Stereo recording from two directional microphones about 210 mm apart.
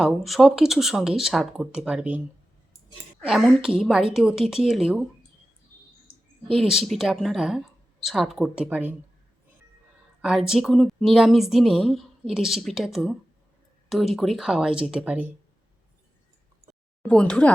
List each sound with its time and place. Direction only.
0.0 s a woman's voice: centre (ahead or behind)
6.5 s a woman's voice: centre (ahead or behind)
10.2 s a woman's voice: 5° right (ahead or behind)
17.0 s a woman's voice: 5° left (ahead or behind)